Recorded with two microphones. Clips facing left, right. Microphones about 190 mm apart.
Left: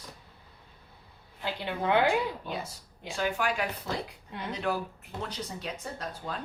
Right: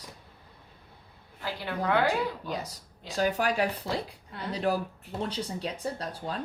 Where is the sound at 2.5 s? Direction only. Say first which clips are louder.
Right 2 dB; 40° right (ahead or behind).